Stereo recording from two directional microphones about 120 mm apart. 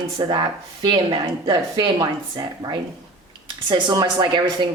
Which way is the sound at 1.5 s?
35° right (ahead or behind).